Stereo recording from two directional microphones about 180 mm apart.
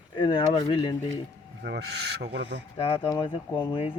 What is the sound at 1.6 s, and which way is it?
Speech, 70° right (ahead or behind).